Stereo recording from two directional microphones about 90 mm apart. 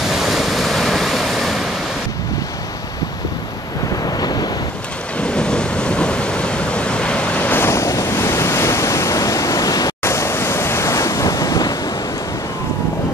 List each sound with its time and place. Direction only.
0.1 s waves: 5° right (ahead or behind)
4.0 s vehicle: 50° left (ahead or behind)
5.2 s waves: 10° left (ahead or behind); by 9.9 s 40° left (ahead or behind)
10.0 s waves: 30° left (ahead or behind)